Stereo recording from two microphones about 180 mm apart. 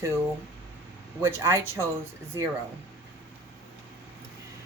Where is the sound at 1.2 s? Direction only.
15° right (ahead or behind).